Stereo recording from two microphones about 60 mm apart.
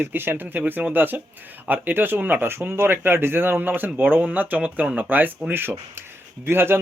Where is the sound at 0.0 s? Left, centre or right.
Right.